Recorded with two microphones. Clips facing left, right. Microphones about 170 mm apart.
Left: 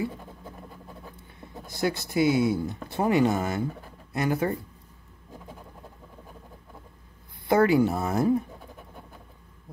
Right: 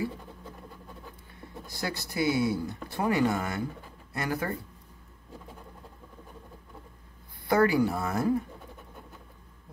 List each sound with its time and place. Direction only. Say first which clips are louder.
1.7 s speech: left 7 dB; 20° left (ahead or behind)
7.4 s speech: left 3 dB; 20° left (ahead or behind)